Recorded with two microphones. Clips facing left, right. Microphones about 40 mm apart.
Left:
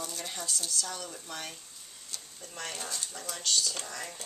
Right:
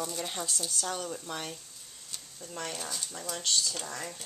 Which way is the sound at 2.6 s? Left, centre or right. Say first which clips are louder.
Left 2 dB; centre.